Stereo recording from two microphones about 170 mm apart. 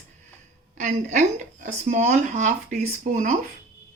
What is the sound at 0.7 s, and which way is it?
Speech, 45° right (ahead or behind).